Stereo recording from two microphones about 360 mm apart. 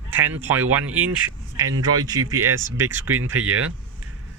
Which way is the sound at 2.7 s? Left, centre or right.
Centre.